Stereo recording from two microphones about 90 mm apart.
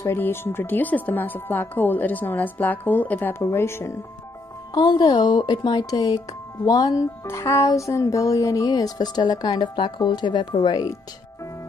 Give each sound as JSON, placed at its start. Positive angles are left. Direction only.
{"t": 0.0, "sound": "speech", "side_deg": 25}
{"t": 4.7, "sound": "speech", "side_deg": 50}
{"t": 8.6, "sound": "speech", "side_deg": 50}
{"t": 9.5, "sound": "speech", "side_deg": 60}